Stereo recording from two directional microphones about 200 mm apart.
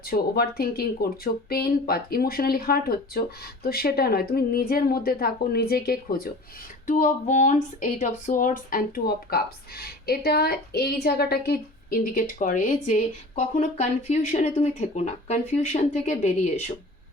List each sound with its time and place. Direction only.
0.0 s speech: 50° left (ahead or behind)
6.8 s speech: 35° left (ahead or behind)